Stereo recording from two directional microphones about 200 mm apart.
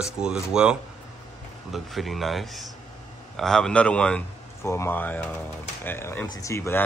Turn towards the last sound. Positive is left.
turn(degrees=15)  # may be behind; listen again after turning